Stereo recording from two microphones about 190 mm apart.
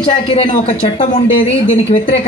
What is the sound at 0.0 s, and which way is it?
Speech, 30° left (ahead or behind).